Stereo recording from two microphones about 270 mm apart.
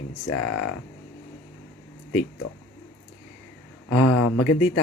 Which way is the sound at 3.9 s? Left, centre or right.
Left.